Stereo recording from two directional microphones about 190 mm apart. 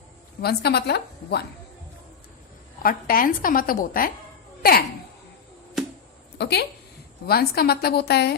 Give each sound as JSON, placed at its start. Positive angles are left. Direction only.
{"t": 0.4, "sound": "a woman's voice", "side_deg": 60}
{"t": 2.8, "sound": "a woman's voice", "side_deg": 50}
{"t": 6.4, "sound": "a woman's voice", "side_deg": 60}